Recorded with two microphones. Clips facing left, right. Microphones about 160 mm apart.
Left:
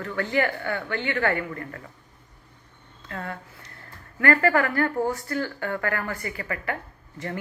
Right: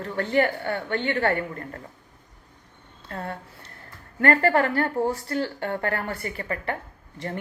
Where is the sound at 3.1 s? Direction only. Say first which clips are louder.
Right 1 dB; 30° right (ahead or behind).